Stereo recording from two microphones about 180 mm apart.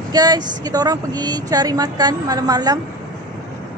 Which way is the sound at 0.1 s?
20° right (ahead or behind).